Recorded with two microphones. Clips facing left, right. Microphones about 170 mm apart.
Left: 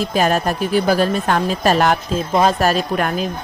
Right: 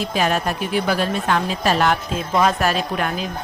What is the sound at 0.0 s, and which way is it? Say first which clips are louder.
A woman's voice: left 3 dB; 45° left (ahead or behind).